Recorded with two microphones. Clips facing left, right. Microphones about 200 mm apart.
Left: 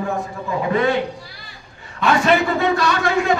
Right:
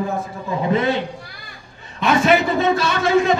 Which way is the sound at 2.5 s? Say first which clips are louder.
Right 1 dB; 20° right (ahead or behind).